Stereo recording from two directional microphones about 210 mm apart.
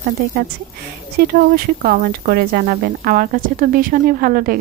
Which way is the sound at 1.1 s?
45° right (ahead or behind).